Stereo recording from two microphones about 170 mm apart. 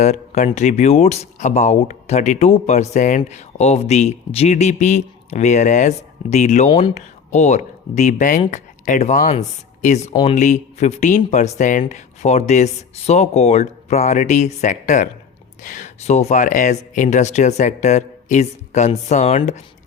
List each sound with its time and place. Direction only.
0.0 s speech: 45° left (ahead or behind)